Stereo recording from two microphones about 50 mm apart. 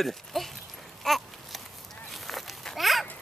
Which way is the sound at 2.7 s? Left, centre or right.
Centre.